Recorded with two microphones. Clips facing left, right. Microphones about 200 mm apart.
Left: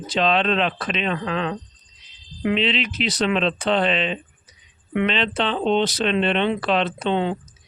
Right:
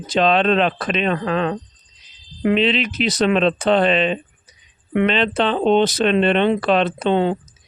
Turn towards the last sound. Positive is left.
turn(degrees=-45)  # may be behind; listen again after turning